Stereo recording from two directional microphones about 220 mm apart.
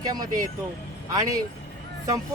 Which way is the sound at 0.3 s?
40° right (ahead or behind).